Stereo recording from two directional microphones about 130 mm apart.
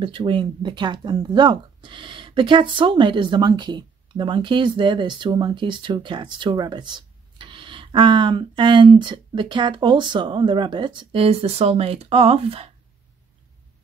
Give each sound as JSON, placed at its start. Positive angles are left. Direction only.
{"t": 0.0, "sound": "speech", "side_deg": -40}